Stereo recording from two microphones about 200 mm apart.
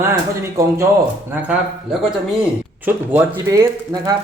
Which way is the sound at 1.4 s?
5° right (ahead or behind).